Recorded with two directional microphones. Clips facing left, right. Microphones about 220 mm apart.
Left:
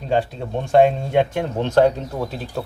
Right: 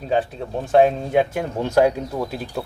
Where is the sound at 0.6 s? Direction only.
5° right (ahead or behind).